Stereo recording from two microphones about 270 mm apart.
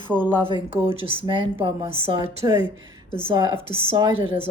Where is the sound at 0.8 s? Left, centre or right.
Centre.